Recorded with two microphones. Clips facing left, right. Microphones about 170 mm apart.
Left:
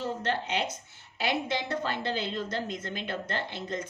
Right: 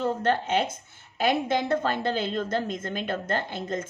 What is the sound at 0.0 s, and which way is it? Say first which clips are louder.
A woman's voice: right 6 dB; 50° right (ahead or behind).